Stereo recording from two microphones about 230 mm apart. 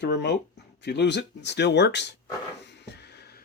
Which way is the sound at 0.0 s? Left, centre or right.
Left.